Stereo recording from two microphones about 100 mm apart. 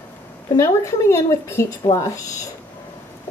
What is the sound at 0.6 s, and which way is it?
A woman's voice, 30° left (ahead or behind).